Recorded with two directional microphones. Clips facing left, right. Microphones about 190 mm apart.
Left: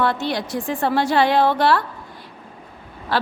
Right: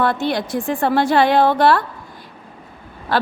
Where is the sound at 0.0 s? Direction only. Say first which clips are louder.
Right 3 dB; 50° right (ahead or behind).